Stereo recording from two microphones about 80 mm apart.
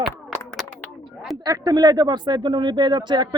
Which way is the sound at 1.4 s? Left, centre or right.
Right.